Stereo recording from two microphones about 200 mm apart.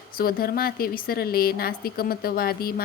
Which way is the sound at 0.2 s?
50° left (ahead or behind).